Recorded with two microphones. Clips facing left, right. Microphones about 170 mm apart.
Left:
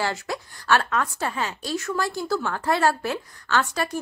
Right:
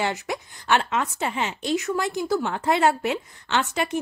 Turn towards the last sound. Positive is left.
turn(degrees=-20)  # may be behind; listen again after turning